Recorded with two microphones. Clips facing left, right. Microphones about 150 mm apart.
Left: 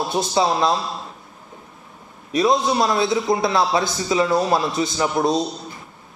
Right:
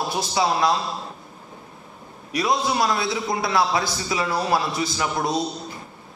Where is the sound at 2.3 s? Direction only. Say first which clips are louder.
Left 4 dB; 25° left (ahead or behind).